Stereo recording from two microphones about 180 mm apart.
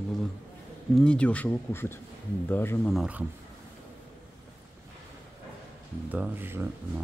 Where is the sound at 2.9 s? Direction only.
5° right (ahead or behind).